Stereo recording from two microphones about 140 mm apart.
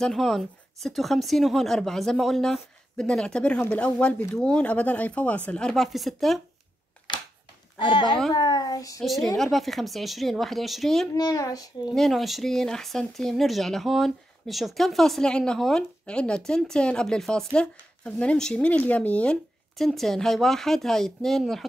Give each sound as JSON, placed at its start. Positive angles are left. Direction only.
{"t": 0.0, "sound": "speech", "side_deg": 0}
{"t": 7.8, "sound": "a child's voice", "side_deg": 35}
{"t": 9.0, "sound": "speech", "side_deg": 0}
{"t": 11.1, "sound": "a child's voice", "side_deg": 25}
{"t": 11.9, "sound": "speech", "side_deg": 0}